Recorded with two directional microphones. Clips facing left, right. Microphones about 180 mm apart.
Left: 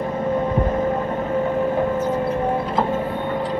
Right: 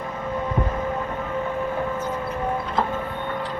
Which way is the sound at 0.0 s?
30° left (ahead or behind).